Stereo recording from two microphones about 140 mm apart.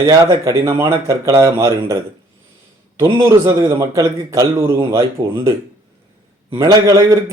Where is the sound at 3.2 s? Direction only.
20° right (ahead or behind).